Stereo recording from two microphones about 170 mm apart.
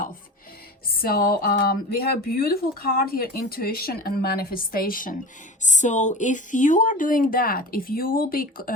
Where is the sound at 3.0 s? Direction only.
60° left (ahead or behind).